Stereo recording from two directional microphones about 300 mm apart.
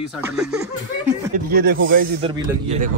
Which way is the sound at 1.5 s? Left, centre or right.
Right.